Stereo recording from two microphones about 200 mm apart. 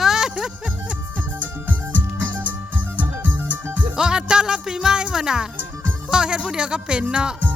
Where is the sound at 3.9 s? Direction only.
5° right (ahead or behind).